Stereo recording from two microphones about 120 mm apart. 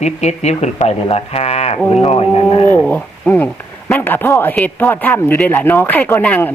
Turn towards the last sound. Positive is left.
turn(degrees=15)  # may be behind; listen again after turning